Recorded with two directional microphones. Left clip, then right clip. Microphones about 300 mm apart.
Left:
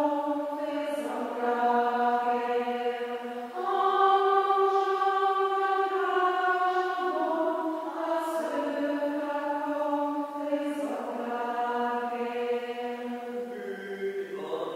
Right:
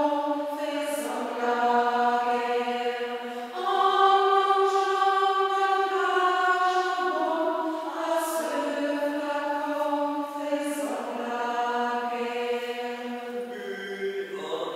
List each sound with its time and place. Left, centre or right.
1.4 s mantra: centre
3.6 s choir: centre
5.9 s chant: centre
7.1 s music: left
11.5 s chant: centre